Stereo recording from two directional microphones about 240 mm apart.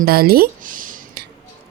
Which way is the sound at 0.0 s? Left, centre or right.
Right.